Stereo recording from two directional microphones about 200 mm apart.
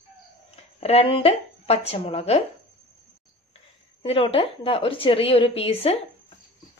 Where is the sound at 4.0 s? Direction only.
30° left (ahead or behind).